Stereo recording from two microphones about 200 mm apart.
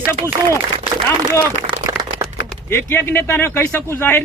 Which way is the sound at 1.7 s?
20° right (ahead or behind).